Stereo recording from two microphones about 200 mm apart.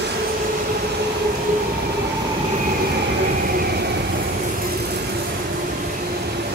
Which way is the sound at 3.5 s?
50° right (ahead or behind).